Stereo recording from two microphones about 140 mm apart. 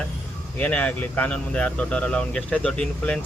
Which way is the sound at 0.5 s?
10° left (ahead or behind).